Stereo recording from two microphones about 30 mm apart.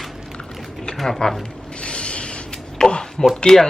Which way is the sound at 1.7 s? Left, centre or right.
Left.